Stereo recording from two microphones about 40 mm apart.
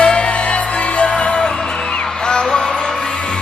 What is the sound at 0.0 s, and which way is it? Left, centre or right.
Music, left.